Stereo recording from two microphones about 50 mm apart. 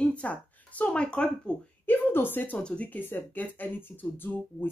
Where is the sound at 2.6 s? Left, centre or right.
Left.